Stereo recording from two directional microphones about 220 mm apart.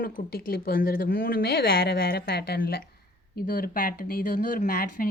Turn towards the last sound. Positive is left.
turn(degrees=35)  # may be behind; listen again after turning